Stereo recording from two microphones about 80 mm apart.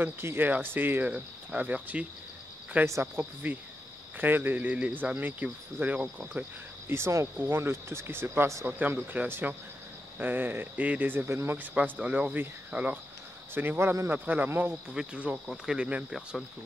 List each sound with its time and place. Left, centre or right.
0.0 s speech: right
2.8 s speech: right
6.9 s speech: right
8.6 s speech: right